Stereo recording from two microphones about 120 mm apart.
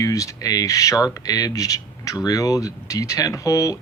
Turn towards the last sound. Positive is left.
turn(degrees=30)  # may be behind; listen again after turning